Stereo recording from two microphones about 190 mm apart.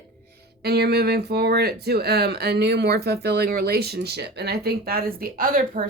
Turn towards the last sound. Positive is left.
turn(degrees=-50)  # may be behind; listen again after turning